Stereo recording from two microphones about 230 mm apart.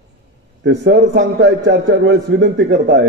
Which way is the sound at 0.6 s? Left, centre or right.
Right.